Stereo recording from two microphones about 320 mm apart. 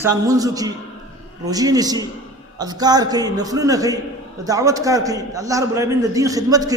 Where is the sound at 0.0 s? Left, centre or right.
Centre.